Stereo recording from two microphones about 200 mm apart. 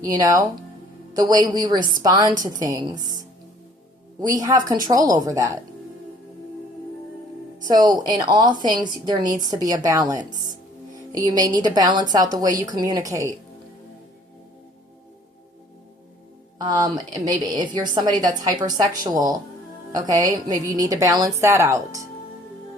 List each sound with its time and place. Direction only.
0.0 s a woman's voice: 20° right (ahead or behind)
4.2 s a woman's voice: 20° right (ahead or behind)
7.7 s a woman's voice: 20° right (ahead or behind)
16.6 s a woman's voice: 20° right (ahead or behind)